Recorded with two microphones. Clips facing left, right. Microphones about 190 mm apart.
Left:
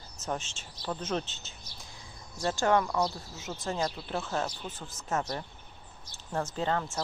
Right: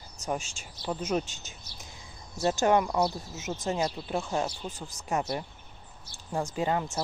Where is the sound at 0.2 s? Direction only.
10° right (ahead or behind).